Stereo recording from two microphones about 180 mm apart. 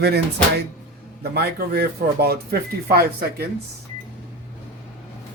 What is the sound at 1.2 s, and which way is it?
Speech, 60° right (ahead or behind).